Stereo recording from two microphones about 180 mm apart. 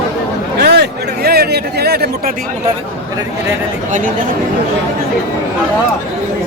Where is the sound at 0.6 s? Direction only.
65° right (ahead or behind).